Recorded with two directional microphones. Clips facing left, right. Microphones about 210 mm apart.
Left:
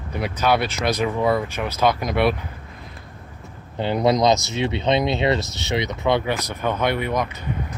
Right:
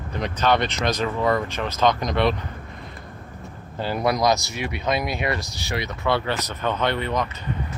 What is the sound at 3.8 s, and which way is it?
Speech, 20° left (ahead or behind).